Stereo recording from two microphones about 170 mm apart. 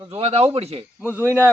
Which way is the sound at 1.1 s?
15° right (ahead or behind).